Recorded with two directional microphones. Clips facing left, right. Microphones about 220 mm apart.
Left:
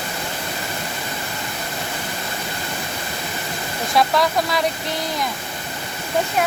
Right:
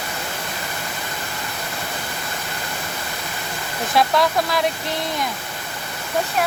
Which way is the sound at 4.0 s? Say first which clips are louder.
Even; centre (ahead or behind).